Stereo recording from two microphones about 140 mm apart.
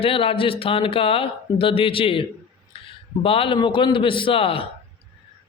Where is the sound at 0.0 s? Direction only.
40° left (ahead or behind).